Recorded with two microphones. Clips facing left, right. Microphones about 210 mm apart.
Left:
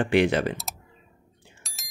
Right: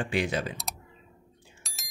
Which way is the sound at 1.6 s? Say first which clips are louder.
Right 1 dB; centre (ahead or behind).